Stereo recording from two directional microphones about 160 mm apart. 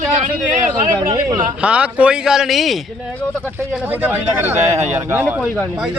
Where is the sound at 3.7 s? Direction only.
10° right (ahead or behind).